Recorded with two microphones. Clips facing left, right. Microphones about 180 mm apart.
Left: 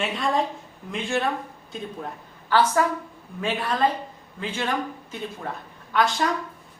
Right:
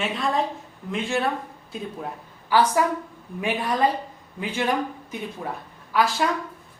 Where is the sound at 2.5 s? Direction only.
15° right (ahead or behind).